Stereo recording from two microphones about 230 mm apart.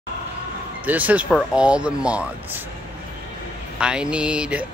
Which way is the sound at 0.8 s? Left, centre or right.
Centre.